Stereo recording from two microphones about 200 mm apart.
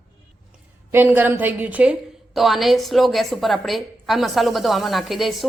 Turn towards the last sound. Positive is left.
turn(degrees=0)  # may be behind; listen again after turning